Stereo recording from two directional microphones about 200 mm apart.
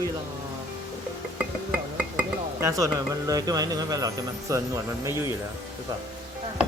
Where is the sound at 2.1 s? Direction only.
15° right (ahead or behind).